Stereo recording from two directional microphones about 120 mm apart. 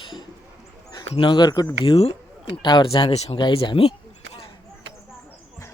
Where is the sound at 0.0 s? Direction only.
40° left (ahead or behind).